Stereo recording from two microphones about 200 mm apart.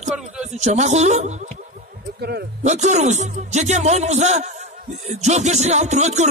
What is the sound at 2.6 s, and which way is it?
Speech, 35° right (ahead or behind).